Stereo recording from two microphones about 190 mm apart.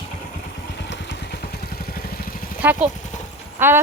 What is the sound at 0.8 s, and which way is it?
Vehicle, 65° left (ahead or behind).